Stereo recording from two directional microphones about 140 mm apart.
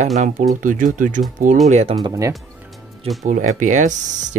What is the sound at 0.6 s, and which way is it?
Speech, 70° right (ahead or behind).